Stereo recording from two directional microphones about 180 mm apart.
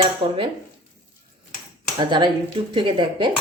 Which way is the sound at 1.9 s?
25° right (ahead or behind).